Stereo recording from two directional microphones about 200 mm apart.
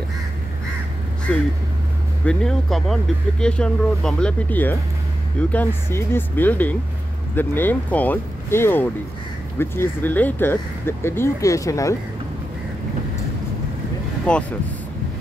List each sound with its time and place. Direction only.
1.3 s speech: 5° left (ahead or behind)
14.3 s speech: 5° left (ahead or behind)